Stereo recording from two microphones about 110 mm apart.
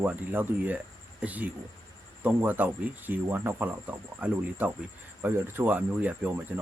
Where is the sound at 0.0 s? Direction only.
15° right (ahead or behind).